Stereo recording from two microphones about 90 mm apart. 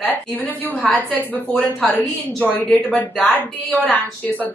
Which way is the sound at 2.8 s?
20° left (ahead or behind).